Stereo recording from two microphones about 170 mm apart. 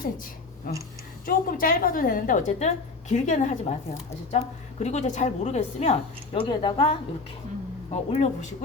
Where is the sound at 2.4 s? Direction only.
40° left (ahead or behind).